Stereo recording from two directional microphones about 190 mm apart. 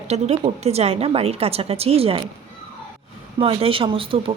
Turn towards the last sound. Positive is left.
turn(degrees=-30)  # may be behind; listen again after turning